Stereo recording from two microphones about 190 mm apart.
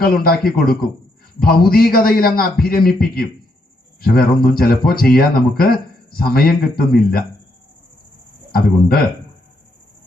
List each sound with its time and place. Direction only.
0.0 s speech: 50° left (ahead or behind)
8.5 s speech: 50° left (ahead or behind)